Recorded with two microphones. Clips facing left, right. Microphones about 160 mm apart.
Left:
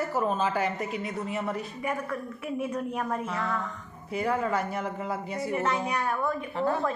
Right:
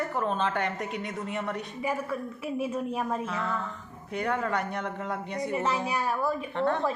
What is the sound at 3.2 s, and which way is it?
A woman's voice, centre (ahead or behind).